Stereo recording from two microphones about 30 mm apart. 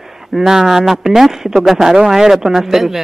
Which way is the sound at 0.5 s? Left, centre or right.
Centre.